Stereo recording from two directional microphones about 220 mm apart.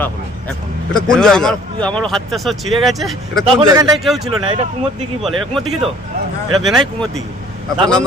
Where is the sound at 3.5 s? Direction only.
15° right (ahead or behind).